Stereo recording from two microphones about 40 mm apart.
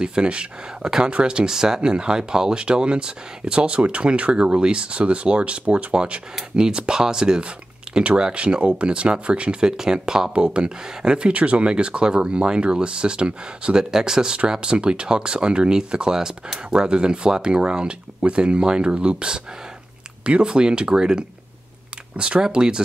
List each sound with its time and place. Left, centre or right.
0.0 s speech: right
10.3 s speech: right
13.9 s speech: centre